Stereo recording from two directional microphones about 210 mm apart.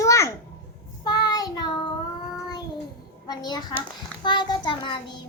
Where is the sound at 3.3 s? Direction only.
20° left (ahead or behind).